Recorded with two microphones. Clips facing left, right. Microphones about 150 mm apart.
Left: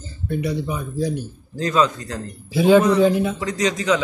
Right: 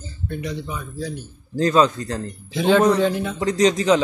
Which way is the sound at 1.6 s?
35° right (ahead or behind).